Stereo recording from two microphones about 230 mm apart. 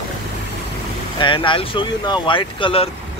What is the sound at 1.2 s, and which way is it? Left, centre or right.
Speech, left.